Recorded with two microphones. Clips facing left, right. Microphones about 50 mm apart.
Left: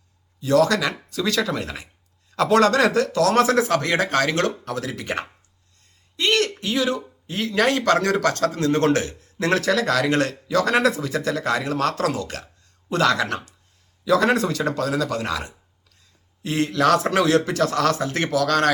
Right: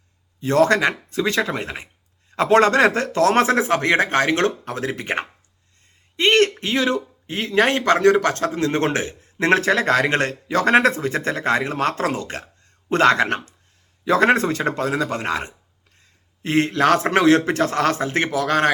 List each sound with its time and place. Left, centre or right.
0.3 s speech: right